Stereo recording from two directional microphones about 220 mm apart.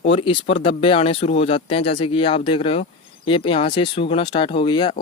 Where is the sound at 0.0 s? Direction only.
25° left (ahead or behind).